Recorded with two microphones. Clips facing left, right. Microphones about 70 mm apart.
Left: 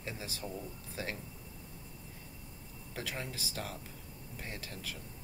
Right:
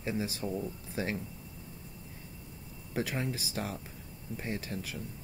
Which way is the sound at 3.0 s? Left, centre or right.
Right.